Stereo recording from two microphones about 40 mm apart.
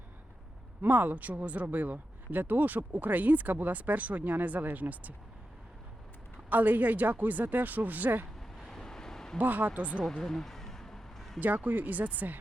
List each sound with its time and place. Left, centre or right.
0.8 s speech: right
6.5 s speech: right
8.4 s vehicle: centre
9.4 s speech: right
10.0 s a sound: centre
11.3 s speech: right